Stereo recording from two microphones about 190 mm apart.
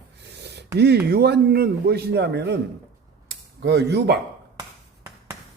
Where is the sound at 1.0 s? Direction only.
55° right (ahead or behind).